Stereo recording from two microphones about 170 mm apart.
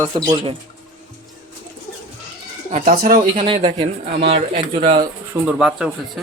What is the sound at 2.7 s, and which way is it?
Speech, 55° right (ahead or behind).